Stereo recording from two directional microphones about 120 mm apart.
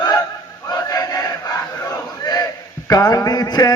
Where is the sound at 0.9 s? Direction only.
30° left (ahead or behind).